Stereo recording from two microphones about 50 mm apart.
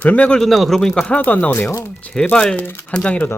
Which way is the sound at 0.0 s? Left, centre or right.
Left.